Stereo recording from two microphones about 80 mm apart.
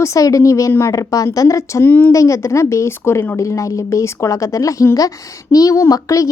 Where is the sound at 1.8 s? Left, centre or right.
Left.